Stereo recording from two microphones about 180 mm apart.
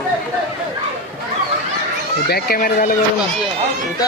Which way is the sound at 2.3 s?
55° left (ahead or behind).